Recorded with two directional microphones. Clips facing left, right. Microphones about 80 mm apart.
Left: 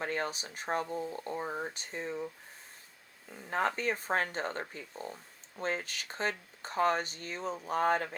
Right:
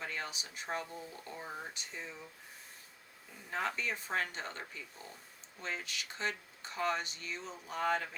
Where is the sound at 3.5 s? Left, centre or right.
Left.